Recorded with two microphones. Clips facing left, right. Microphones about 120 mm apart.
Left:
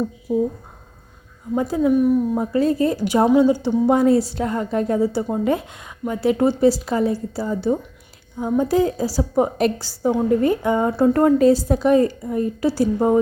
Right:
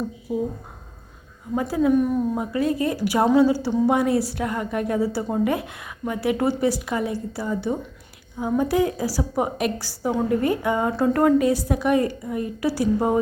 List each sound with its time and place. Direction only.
0.3 s speech: 5° right (ahead or behind)
1.5 s a woman's voice: 25° left (ahead or behind)
1.9 s speech: 10° left (ahead or behind)
2.4 s a woman's voice: 30° left (ahead or behind)
9.8 s a woman's voice: 20° left (ahead or behind)